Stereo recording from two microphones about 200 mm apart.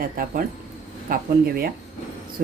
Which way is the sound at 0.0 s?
45° right (ahead or behind).